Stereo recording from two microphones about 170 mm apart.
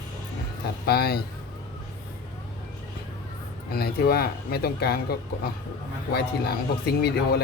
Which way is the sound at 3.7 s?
65° left (ahead or behind).